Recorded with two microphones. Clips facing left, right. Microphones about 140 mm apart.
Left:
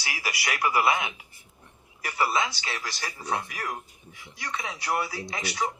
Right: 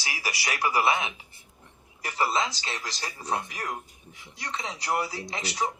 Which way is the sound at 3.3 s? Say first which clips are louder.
Even; 20° right (ahead or behind).